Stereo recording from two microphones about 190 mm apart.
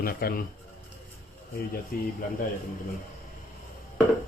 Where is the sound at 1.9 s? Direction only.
50° left (ahead or behind).